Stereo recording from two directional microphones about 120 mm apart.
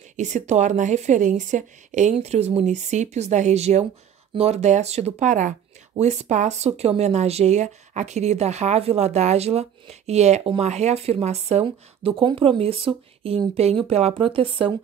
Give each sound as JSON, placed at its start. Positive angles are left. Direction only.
{"t": 0.1, "sound": "speech", "side_deg": -80}